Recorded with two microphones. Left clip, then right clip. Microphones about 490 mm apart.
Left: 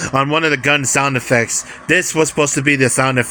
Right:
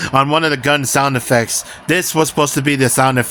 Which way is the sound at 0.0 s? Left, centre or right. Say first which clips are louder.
Right 2 dB; right.